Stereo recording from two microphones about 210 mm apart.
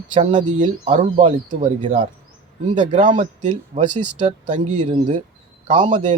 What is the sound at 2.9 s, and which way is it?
Speech, 35° right (ahead or behind).